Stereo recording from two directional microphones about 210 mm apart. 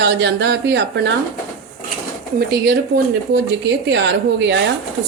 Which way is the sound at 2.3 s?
45° right (ahead or behind).